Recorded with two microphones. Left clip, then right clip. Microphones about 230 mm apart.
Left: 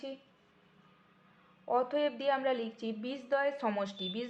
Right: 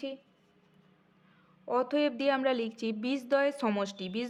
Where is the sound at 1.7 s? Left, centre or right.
Right.